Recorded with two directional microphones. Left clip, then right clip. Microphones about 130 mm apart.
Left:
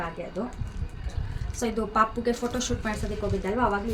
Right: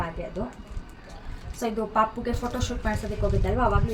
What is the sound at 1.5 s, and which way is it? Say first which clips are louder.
A woman's voice: even; centre (ahead or behind).